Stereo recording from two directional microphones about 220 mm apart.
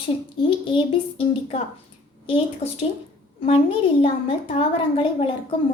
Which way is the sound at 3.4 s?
25° left (ahead or behind).